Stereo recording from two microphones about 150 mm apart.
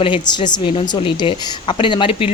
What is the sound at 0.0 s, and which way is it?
A woman's voice, 30° left (ahead or behind).